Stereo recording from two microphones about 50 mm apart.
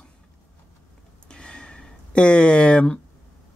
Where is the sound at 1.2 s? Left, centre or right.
Centre.